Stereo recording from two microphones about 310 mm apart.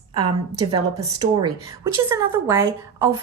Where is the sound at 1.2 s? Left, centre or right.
Centre.